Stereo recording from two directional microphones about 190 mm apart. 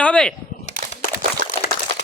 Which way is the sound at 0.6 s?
35° left (ahead or behind).